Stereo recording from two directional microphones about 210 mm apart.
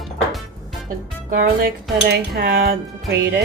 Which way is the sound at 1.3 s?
40° right (ahead or behind).